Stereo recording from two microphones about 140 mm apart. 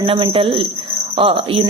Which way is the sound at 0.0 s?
40° right (ahead or behind).